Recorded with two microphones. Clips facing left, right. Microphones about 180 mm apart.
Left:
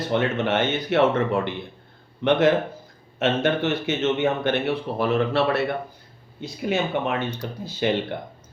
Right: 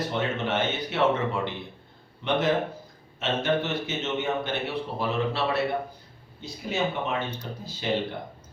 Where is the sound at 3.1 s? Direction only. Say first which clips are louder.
Left 4 dB; 65° left (ahead or behind).